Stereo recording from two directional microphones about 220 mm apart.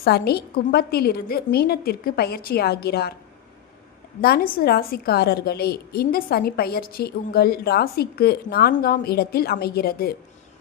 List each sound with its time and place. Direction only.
0.0 s a woman's voice: 45° left (ahead or behind)
4.2 s a woman's voice: 40° left (ahead or behind)